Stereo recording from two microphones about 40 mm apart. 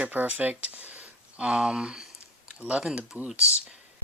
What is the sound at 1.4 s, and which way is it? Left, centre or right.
Speech, right.